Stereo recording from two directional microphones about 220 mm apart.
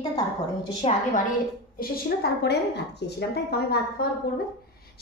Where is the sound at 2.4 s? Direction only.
50° left (ahead or behind).